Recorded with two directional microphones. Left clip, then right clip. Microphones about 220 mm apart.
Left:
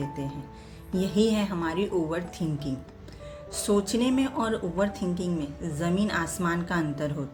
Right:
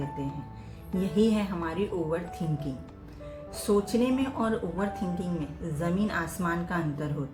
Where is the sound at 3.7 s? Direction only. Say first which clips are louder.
Even; 45° left (ahead or behind).